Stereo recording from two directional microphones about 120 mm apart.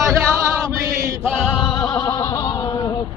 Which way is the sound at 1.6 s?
30° left (ahead or behind).